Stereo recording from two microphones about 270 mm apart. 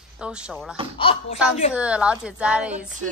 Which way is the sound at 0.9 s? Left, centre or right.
Centre.